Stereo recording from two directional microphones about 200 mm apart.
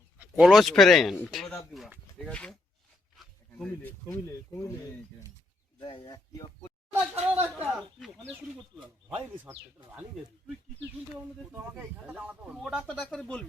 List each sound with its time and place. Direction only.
0.2 s speech: 5° right (ahead or behind)
5.8 s speech: 20° left (ahead or behind)
7.0 s a sound: 10° right (ahead or behind)
7.8 s speech: centre (ahead or behind)
9.1 s speech: 10° right (ahead or behind)
12.0 s speech: 5° right (ahead or behind)